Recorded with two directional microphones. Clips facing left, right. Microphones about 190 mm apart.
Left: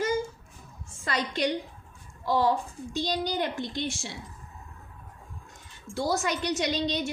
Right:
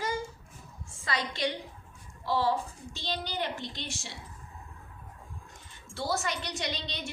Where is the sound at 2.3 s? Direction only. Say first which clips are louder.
Left 4 dB; 45° left (ahead or behind).